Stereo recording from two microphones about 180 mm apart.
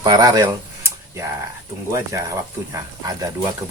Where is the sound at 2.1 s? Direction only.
15° right (ahead or behind).